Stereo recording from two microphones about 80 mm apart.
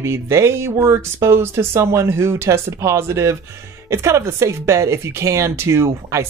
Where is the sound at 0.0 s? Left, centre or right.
Right.